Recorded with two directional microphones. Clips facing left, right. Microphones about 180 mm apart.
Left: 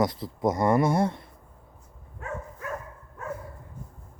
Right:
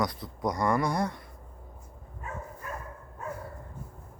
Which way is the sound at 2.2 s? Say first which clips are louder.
Left 6 dB; 80° left.